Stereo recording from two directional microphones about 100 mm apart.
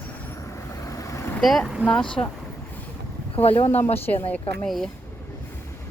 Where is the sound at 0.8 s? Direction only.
30° left (ahead or behind).